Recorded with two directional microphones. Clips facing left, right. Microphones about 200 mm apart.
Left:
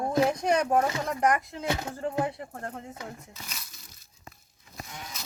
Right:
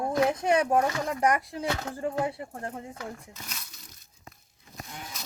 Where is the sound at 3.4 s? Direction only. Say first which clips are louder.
Right 1 dB; centre (ahead or behind).